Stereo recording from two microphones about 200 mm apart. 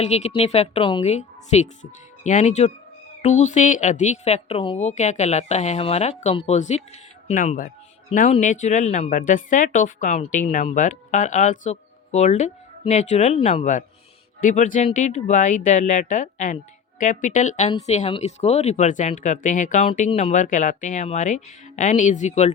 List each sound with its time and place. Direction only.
0.0 s a woman's voice: 35° left (ahead or behind)